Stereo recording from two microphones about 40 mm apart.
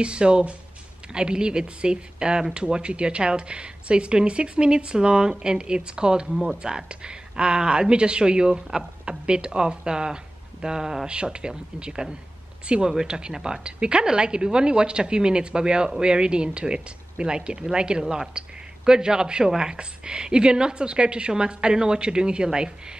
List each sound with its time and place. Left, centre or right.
0.0 s speech: right